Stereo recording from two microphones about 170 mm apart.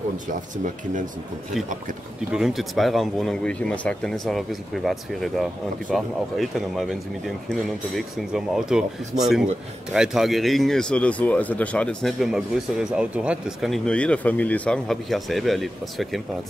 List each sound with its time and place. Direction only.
2.3 s speech: centre (ahead or behind)